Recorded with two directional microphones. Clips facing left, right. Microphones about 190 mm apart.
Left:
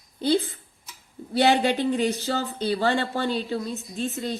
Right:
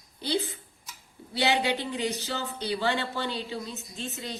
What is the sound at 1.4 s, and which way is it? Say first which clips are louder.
Speech: left 6 dB; 50° left (ahead or behind).